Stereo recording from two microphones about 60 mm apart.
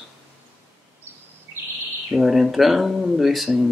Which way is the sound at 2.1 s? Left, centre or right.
Centre.